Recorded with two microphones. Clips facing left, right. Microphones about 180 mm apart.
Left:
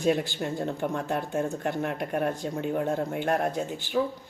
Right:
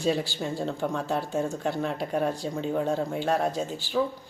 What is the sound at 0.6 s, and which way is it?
Speech, 15° left (ahead or behind).